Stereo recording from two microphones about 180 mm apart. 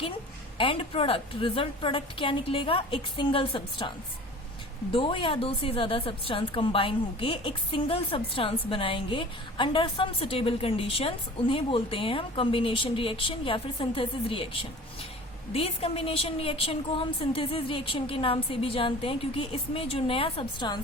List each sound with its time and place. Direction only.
0.6 s a woman's voice: 30° left (ahead or behind)